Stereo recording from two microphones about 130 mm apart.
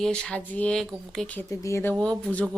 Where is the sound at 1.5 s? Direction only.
25° left (ahead or behind).